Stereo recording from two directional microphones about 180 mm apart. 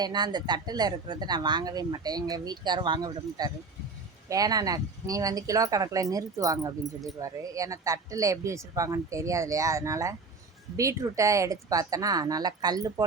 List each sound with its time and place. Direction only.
0.0 s speech: 25° right (ahead or behind)